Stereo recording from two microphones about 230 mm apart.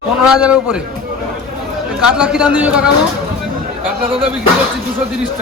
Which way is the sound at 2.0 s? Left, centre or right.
Centre.